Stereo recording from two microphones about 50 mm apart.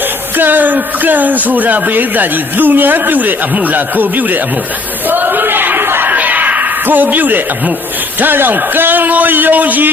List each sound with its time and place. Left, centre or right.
0.3 s speech: right
5.0 s battle cry: right
6.1 s a sound: right
8.2 s speech: right